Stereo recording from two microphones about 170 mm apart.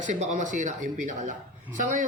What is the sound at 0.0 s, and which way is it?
A man's voice, 45° right (ahead or behind).